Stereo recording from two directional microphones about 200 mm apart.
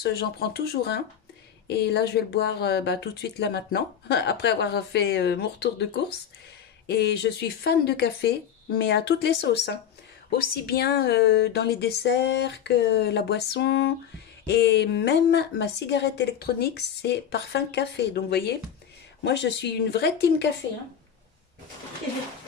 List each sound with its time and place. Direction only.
0.0 s speech: 50° left (ahead or behind)
6.9 s speech: 55° left (ahead or behind)